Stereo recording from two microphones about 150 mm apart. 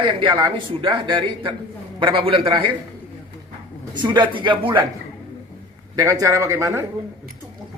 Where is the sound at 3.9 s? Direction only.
30° right (ahead or behind).